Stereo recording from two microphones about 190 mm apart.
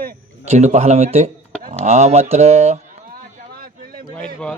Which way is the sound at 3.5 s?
50° right (ahead or behind).